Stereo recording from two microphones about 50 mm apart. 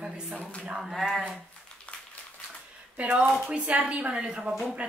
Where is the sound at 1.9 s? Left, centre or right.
Left.